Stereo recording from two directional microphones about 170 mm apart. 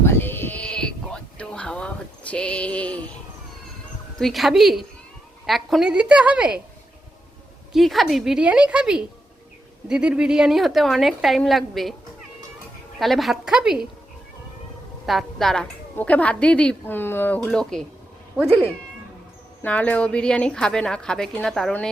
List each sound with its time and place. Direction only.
0.0 s a sound: 15° left (ahead or behind)
4.2 s a woman's voice: centre (ahead or behind)
7.7 s a woman's voice: centre (ahead or behind)
13.0 s a woman's voice: centre (ahead or behind)
15.0 s a woman's voice: centre (ahead or behind)
18.4 s speech: 35° right (ahead or behind)
19.6 s a woman's voice: 10° left (ahead or behind)